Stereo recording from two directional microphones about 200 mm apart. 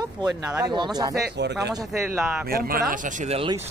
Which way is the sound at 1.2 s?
55° right (ahead or behind).